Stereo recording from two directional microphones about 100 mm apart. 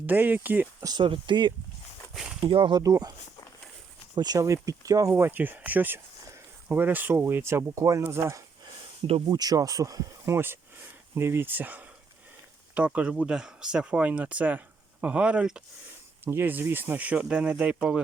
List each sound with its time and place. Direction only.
0.0 s speech: 15° right (ahead or behind)
0.8 s speech: 40° right (ahead or behind)
1.0 s speech: 55° right (ahead or behind)
2.1 s speech: 10° right (ahead or behind)
2.4 s speech: 65° right (ahead or behind)
2.7 s speech: 40° right (ahead or behind)
9.3 s speech: 40° right (ahead or behind)
10.3 s speech: 25° right (ahead or behind)
16.2 s speech: 20° right (ahead or behind)